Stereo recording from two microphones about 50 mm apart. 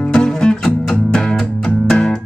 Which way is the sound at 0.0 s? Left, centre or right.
Centre.